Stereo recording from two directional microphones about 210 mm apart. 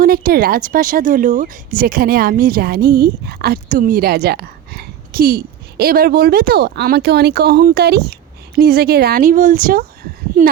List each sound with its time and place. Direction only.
0.0 s speech: 40° right (ahead or behind)